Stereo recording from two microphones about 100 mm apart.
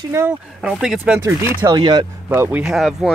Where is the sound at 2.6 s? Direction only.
5° right (ahead or behind).